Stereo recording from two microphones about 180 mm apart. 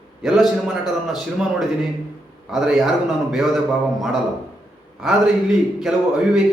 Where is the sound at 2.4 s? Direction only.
5° right (ahead or behind).